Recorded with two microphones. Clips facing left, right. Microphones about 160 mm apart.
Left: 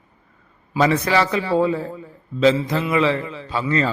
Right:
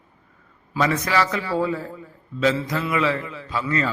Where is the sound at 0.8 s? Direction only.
30° left (ahead or behind).